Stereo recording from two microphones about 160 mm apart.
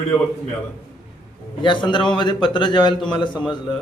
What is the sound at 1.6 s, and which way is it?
A man's voice, 30° left (ahead or behind).